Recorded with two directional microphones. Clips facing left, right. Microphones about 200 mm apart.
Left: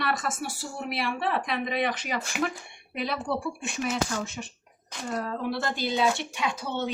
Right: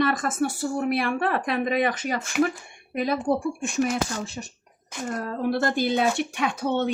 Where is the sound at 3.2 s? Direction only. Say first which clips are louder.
Right 6 dB; 45° right (ahead or behind).